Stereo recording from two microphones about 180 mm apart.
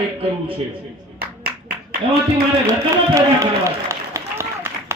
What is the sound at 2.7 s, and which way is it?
Run, 15° right (ahead or behind).